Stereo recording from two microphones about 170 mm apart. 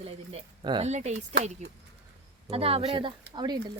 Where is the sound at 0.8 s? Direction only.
40° right (ahead or behind).